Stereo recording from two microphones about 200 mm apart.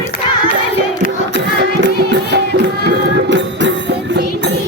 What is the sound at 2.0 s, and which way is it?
Music, 60° right (ahead or behind).